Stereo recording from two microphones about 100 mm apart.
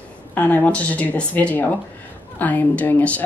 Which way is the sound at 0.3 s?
15° left (ahead or behind).